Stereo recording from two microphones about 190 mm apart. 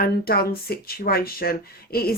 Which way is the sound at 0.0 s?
55° left (ahead or behind).